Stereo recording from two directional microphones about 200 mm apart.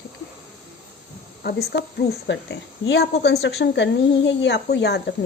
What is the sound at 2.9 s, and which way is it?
Speech, 55° left (ahead or behind).